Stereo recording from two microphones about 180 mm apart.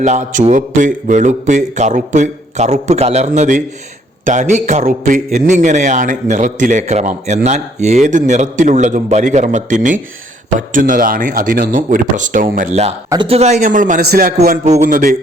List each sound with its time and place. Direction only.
0.0 s a man's voice: 40° right (ahead or behind)
13.1 s a man's voice: 30° right (ahead or behind); by 14.6 s 55° right (ahead or behind)
14.6 s a man's voice: 45° right (ahead or behind)